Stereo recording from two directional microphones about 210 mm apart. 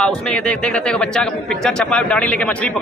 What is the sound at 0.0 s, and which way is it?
Speech, 5° left (ahead or behind).